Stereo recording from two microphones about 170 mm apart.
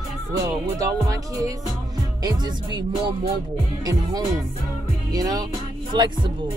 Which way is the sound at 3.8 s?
20° right (ahead or behind).